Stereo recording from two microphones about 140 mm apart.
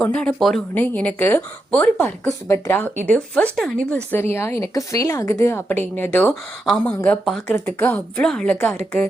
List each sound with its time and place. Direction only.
0.0 s speech: 10° left (ahead or behind)
7.5 s speech: 15° left (ahead or behind)